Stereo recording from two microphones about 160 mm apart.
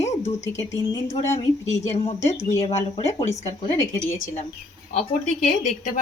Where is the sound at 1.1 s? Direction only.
40° left (ahead or behind).